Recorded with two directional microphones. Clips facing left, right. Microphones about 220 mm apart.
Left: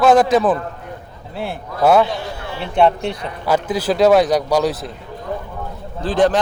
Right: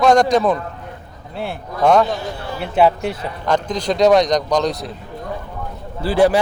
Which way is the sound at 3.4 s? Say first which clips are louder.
Left 1 dB; 5° left (ahead or behind).